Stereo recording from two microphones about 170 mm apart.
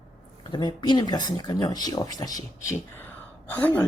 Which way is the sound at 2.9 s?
10° left (ahead or behind).